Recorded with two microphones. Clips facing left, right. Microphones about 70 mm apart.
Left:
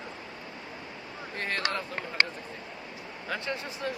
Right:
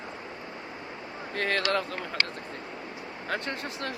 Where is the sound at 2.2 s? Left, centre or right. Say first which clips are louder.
Left 4 dB; left.